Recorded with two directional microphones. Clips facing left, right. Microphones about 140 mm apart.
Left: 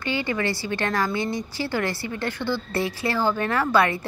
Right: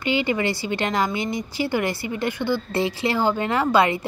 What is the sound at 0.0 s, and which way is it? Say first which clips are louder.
A woman's voice: right 3 dB; 15° right (ahead or behind).